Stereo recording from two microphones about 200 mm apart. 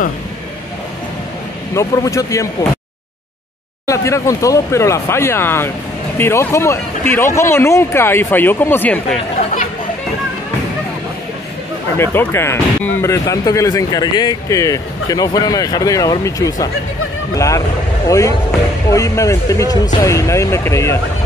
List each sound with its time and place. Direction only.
1.8 s speech: 15° left (ahead or behind)
3.8 s speech: 15° left (ahead or behind)
12.0 s speech: 10° left (ahead or behind)